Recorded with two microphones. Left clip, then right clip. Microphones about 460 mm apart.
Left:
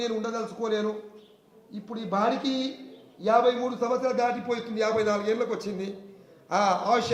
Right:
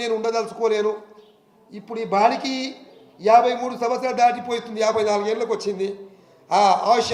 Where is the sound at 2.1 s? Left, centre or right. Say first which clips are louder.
Right 7 dB; right.